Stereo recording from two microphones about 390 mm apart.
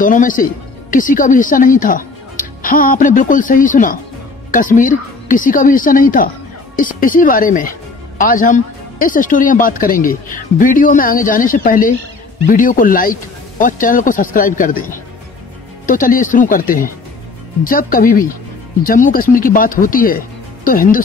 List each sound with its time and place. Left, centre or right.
0.0 s a woman's voice: centre